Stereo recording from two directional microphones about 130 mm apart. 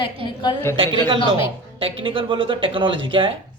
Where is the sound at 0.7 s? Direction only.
40° right (ahead or behind).